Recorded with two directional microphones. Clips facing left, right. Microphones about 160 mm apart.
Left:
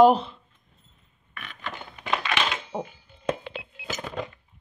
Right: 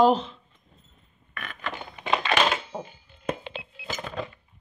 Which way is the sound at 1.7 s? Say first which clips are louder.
Right 2 dB; 20° right (ahead or behind).